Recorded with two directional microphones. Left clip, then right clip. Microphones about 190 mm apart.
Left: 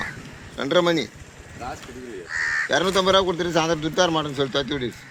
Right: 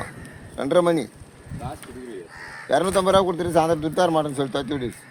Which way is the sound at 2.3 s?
40° right (ahead or behind).